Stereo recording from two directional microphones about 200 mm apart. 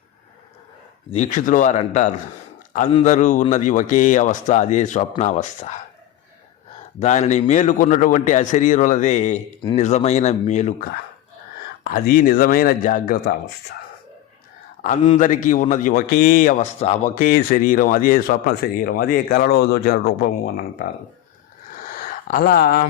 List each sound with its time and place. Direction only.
1.1 s a man's voice: 35° left (ahead or behind)
7.0 s a man's voice: 35° left (ahead or behind)
11.8 s a man's voice: 45° left (ahead or behind)
14.8 s a man's voice: 35° left (ahead or behind)
21.8 s a sound: 40° left (ahead or behind)